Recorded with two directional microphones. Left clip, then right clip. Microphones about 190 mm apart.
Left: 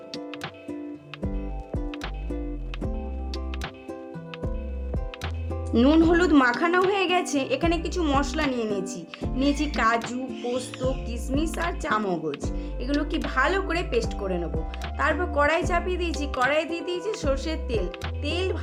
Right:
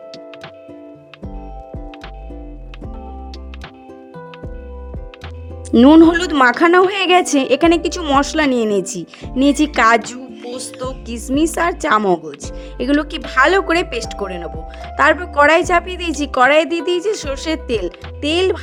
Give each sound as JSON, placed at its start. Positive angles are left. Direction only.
{"t": 5.7, "sound": "a woman's voice", "side_deg": -45}